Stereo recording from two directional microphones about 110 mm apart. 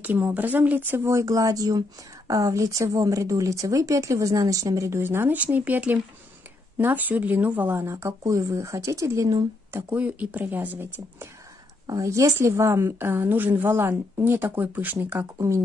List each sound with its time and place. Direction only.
0.0 s speech: 15° right (ahead or behind)
7.8 s speech: 25° right (ahead or behind)
11.9 s speech: 30° right (ahead or behind)
15.3 s speech: 30° right (ahead or behind)